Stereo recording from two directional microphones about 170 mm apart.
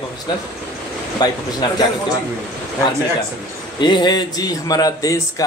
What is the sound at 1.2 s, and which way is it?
Speech, 25° left (ahead or behind).